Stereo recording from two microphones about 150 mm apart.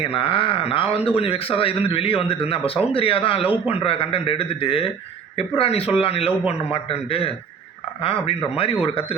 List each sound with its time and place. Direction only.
0.0 s speech: 35° left (ahead or behind)